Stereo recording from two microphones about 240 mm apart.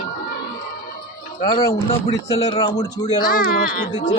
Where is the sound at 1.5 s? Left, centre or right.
Centre.